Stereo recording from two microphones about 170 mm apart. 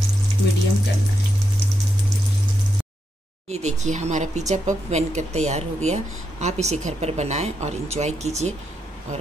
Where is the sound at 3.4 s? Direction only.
40° right (ahead or behind).